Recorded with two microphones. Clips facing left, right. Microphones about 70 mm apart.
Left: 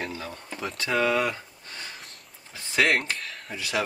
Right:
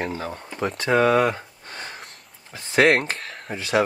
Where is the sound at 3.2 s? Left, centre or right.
Right.